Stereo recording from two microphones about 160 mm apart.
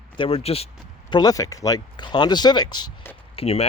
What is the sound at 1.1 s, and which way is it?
Speech, 25° left (ahead or behind).